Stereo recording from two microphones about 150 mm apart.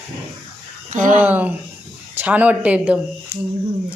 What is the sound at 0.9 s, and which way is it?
Speech, 60° right (ahead or behind).